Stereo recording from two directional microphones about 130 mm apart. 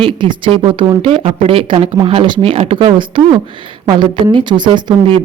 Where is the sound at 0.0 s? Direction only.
35° right (ahead or behind).